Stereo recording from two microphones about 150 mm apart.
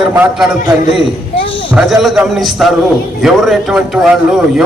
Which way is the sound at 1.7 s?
Centre (ahead or behind).